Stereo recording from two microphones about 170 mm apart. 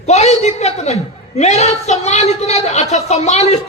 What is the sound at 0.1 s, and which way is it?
A woman's voice, 40° left (ahead or behind).